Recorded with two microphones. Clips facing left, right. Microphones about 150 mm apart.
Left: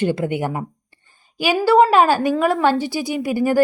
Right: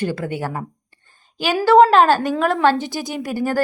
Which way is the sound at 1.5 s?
5° left (ahead or behind).